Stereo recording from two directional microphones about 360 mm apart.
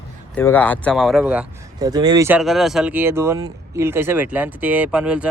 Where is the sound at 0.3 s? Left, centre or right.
Centre.